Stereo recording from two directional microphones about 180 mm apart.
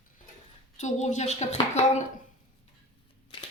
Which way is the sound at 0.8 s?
40° left (ahead or behind).